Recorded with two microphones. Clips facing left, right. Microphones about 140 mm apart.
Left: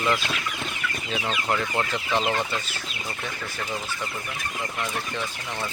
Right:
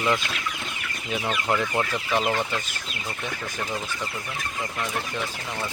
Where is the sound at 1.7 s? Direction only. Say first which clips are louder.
Right 1 dB; 10° right (ahead or behind).